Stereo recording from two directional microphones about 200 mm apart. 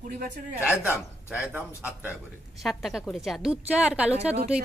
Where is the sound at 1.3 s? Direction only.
5° right (ahead or behind).